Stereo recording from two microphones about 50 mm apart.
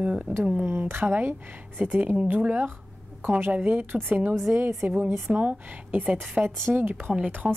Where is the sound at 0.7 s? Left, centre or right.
Right.